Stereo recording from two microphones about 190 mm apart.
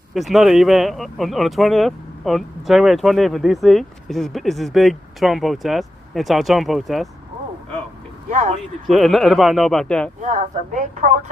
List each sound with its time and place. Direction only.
0.1 s speech: centre (ahead or behind)
8.3 s a sound: 40° right (ahead or behind)
8.9 s speech: centre (ahead or behind)
10.2 s speech: 40° right (ahead or behind)